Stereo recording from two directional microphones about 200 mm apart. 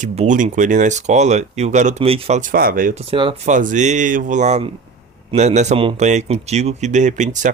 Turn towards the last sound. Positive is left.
turn(degrees=-40)  # may be behind; listen again after turning